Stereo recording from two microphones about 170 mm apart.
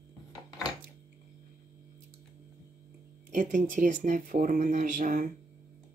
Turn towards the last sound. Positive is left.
turn(degrees=-50)  # may be behind; listen again after turning